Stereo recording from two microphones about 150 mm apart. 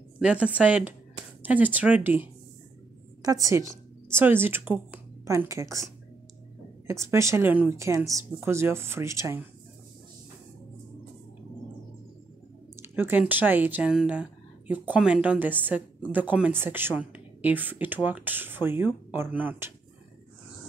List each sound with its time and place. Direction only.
0.2 s speech: 5° right (ahead or behind)
3.2 s a woman's voice: 25° right (ahead or behind)
6.9 s speech: 20° right (ahead or behind)
12.9 s speech: 15° right (ahead or behind)